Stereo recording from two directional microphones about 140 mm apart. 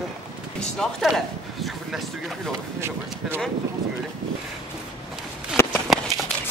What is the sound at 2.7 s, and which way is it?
Speech, 15° right (ahead or behind).